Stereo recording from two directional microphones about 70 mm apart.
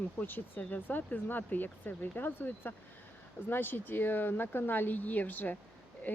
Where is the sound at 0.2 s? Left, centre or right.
Left.